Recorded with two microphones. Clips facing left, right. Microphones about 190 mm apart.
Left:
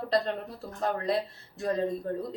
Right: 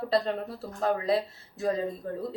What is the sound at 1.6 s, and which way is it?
Speech, centre (ahead or behind).